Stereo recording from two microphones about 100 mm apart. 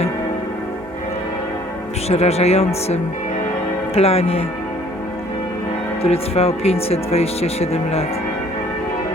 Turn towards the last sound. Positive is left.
turn(degrees=90)